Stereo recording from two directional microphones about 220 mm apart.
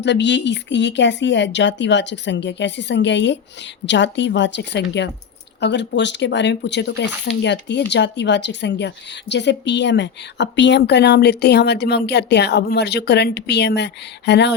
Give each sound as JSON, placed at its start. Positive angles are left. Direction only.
{"t": 0.0, "sound": "a woman's voice", "side_deg": 50}